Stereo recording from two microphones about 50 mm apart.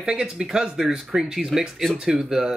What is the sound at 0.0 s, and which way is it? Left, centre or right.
Speech, centre.